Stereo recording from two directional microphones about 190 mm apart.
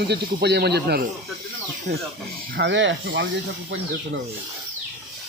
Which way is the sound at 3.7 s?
90° right.